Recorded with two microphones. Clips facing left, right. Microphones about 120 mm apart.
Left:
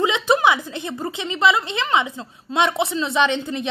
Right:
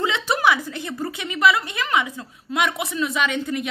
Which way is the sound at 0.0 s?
20° left (ahead or behind).